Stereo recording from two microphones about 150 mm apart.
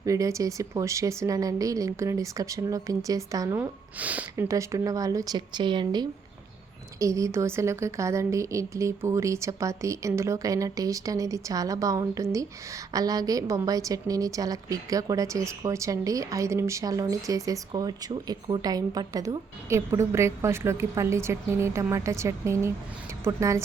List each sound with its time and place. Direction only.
0.0 s a woman's voice: 20° right (ahead or behind)
4.4 s a woman's voice: 20° right (ahead or behind)